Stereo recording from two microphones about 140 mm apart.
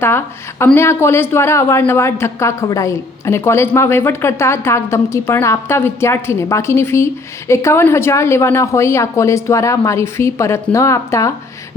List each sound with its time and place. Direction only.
0.6 s a woman's voice: 15° left (ahead or behind)